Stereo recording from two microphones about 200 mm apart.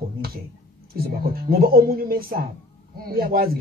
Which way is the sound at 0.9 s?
50° right (ahead or behind).